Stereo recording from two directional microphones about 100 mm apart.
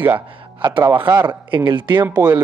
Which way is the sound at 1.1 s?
30° right (ahead or behind).